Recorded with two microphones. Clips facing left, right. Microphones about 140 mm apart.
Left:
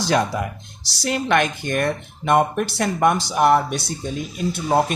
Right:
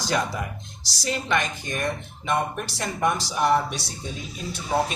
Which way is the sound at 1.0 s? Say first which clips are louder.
Left 6 dB; 65° left (ahead or behind).